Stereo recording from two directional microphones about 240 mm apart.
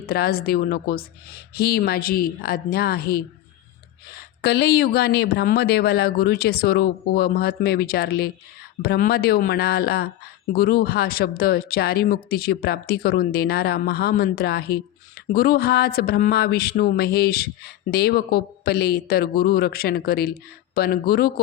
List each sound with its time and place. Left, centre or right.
0.0 s speech: left